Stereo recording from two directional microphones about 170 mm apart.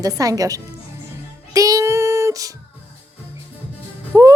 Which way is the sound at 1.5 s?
20° right (ahead or behind).